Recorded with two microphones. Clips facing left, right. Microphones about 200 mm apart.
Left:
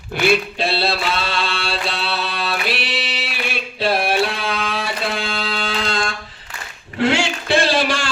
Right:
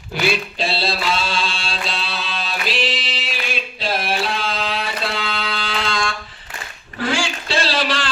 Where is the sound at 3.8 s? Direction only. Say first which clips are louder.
Left 5 dB; 60° left (ahead or behind).